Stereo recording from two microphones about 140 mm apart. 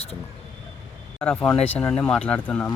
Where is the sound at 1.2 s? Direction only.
10° left (ahead or behind).